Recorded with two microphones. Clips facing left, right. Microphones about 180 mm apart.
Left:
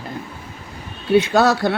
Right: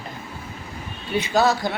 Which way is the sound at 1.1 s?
70° left (ahead or behind).